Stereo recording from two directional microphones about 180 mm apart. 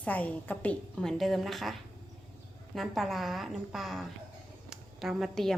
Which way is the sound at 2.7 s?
Centre (ahead or behind).